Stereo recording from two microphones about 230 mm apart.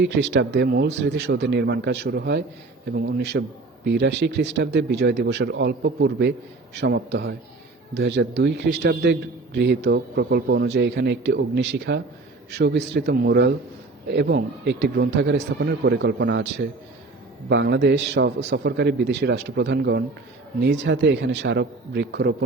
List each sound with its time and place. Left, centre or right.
0.0 s a man's voice: right